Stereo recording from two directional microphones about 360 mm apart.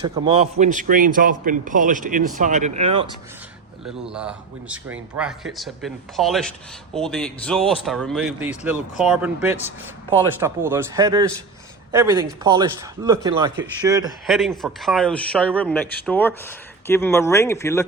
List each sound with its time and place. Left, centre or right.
0.0 s a man's voice: centre
3.8 s speech: centre